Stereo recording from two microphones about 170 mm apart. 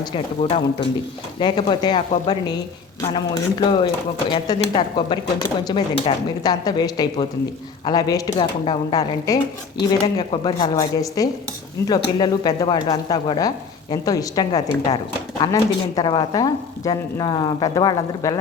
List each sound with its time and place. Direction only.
0.0 s speech: 30° left (ahead or behind)